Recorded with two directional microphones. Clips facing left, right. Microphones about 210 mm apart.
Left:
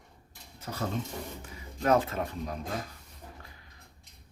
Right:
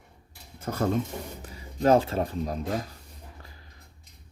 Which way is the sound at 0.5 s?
50° right (ahead or behind).